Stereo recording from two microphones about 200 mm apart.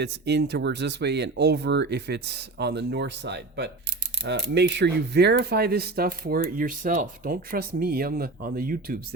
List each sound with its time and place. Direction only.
0.0 s speech: 55° right (ahead or behind)